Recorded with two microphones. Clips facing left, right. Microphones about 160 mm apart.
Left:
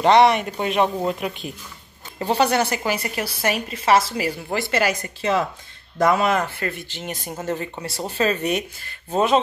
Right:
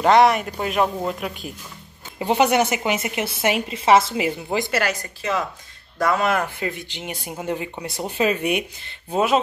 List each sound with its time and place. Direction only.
0.0 s speech: centre (ahead or behind)
2.1 s a woman's voice: 15° right (ahead or behind)
4.6 s speech: 5° left (ahead or behind)
5.2 s speech: 30° left (ahead or behind)
6.1 s speech: centre (ahead or behind)
6.4 s speech: 15° right (ahead or behind)